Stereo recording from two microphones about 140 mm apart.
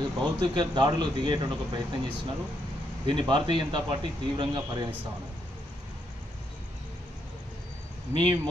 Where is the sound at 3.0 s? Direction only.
35° right (ahead or behind).